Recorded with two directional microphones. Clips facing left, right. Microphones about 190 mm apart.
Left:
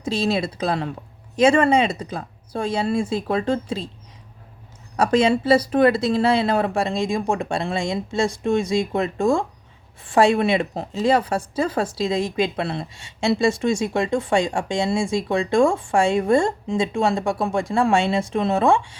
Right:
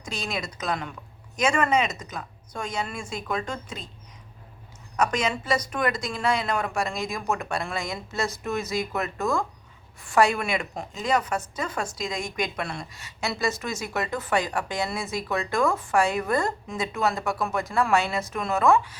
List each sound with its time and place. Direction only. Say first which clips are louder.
0.0 s a woman's voice: left 10 dB; 30° left (ahead or behind)
4.9 s a woman's voice: left 8 dB; 30° left (ahead or behind)